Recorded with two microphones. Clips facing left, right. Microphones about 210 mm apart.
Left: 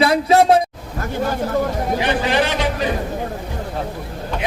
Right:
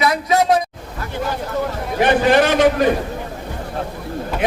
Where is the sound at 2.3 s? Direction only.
50° right (ahead or behind).